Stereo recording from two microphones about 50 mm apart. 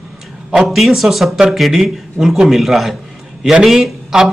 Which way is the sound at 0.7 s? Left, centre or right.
Centre.